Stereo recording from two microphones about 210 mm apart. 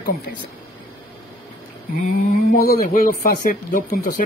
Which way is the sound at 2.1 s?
40° left (ahead or behind).